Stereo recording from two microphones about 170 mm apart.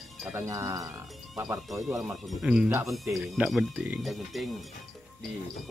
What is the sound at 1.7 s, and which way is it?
Speech, centre (ahead or behind).